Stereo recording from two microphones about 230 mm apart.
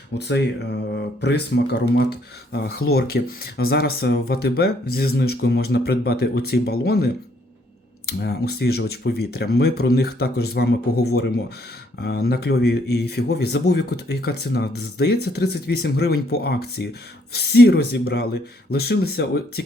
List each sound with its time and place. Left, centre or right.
0.1 s speech: left